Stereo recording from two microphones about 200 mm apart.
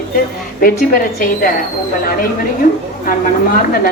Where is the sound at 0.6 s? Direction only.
45° left (ahead or behind).